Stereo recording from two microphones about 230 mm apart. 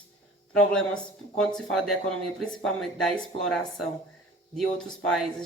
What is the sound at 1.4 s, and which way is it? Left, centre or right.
Speech, centre.